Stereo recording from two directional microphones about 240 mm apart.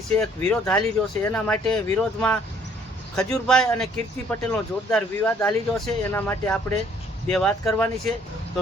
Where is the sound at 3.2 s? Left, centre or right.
Centre.